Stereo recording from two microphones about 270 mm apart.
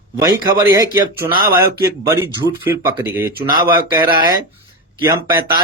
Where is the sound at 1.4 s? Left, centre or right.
Right.